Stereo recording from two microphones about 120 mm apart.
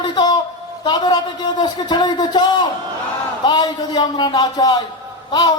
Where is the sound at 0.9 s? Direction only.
35° left (ahead or behind).